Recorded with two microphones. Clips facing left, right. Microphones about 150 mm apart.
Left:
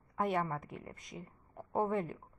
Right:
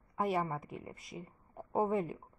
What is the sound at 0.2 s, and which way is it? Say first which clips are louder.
Speech: even; 5° right (ahead or behind).